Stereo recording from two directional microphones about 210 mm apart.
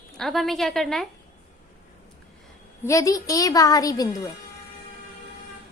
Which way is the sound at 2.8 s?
15° left (ahead or behind).